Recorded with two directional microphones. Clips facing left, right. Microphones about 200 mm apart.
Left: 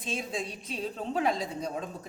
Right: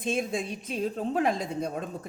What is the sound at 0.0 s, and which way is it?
A woman's voice, 55° right (ahead or behind).